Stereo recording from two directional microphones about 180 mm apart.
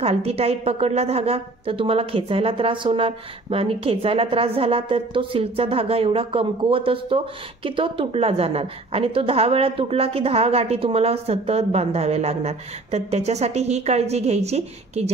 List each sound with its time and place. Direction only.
0.0 s a woman's voice: 35° right (ahead or behind)